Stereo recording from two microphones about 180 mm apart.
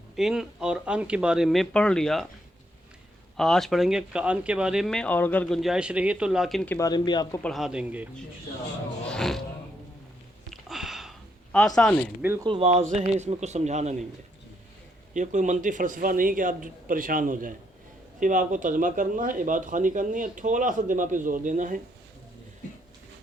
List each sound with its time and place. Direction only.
0.2 s speech: 5° right (ahead or behind)
3.3 s speech: centre (ahead or behind)
6.7 s speech: 20° left (ahead or behind)
7.4 s speech: centre (ahead or behind)
9.0 s speech: 5° left (ahead or behind)
10.5 s a sound: centre (ahead or behind)
11.5 s speech: 5° left (ahead or behind)
12.2 s speech: 10° right (ahead or behind)
12.5 s speech: 35° right (ahead or behind)
15.1 s speech: 45° right (ahead or behind)